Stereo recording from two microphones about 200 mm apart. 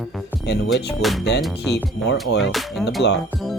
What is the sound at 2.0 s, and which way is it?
Speech, 55° left (ahead or behind).